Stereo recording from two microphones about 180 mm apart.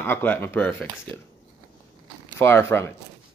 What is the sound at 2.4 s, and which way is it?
Speech, 15° left (ahead or behind).